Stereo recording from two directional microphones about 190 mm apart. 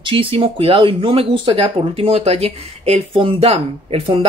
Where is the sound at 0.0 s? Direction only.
25° right (ahead or behind).